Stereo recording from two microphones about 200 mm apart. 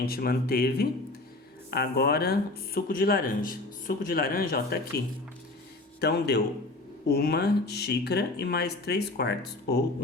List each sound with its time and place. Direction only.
0.0 s speech: 50° left (ahead or behind)
6.0 s speech: 55° left (ahead or behind)